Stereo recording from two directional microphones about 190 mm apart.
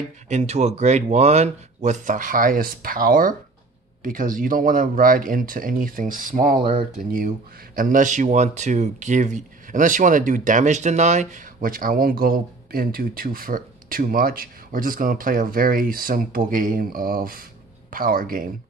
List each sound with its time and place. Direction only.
0.3 s speech: 35° right (ahead or behind)
7.7 s speech: 45° right (ahead or behind)